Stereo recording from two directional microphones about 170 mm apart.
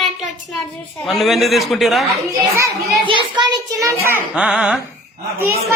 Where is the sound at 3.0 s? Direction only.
30° right (ahead or behind).